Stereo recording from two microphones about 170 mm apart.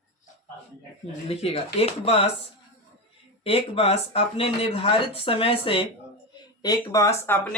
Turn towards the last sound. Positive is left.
turn(degrees=10)  # may be behind; listen again after turning